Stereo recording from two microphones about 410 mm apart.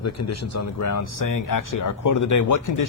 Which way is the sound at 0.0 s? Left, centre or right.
Left.